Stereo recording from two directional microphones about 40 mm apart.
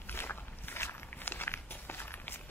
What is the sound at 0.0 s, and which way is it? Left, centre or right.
Walk, left.